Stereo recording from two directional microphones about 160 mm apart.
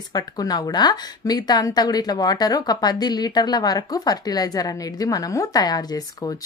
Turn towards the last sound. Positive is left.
turn(degrees=25)  # may be behind; listen again after turning